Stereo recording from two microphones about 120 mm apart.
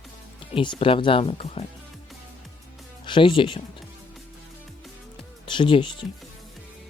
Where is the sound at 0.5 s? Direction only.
45° left (ahead or behind).